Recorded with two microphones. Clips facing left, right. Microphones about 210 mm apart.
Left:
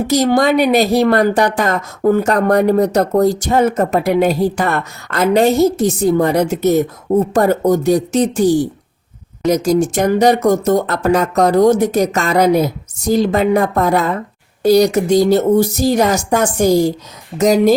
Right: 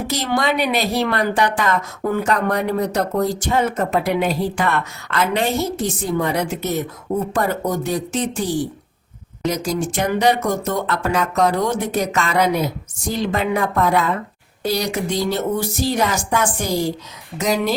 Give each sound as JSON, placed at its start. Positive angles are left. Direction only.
{"t": 0.1, "sound": "speech", "side_deg": 45}